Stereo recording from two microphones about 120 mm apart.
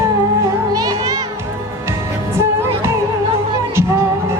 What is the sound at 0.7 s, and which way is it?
Music, 30° right (ahead or behind).